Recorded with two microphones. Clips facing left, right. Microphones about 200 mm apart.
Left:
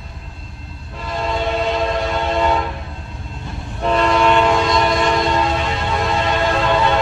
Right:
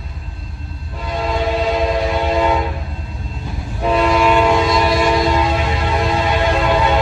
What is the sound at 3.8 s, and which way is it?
Train, 5° right (ahead or behind).